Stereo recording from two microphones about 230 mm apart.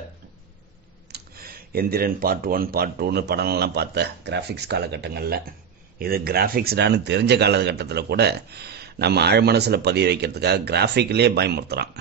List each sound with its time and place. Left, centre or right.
1.1 s speech: right